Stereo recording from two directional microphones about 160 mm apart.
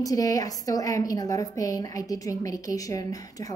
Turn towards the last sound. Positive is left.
turn(degrees=20)  # may be behind; listen again after turning